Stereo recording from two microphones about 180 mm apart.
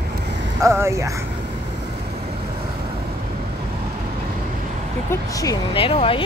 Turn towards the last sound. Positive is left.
turn(degrees=30)  # may be behind; listen again after turning